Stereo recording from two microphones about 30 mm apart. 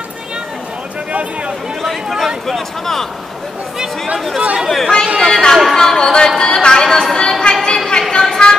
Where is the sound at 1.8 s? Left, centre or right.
Centre.